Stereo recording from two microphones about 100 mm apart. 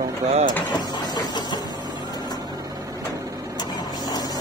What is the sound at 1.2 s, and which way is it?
Printer, 45° left (ahead or behind).